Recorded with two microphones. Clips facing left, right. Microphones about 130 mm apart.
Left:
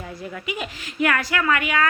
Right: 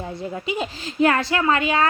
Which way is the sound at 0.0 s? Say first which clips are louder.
Right 4 dB; 25° right (ahead or behind).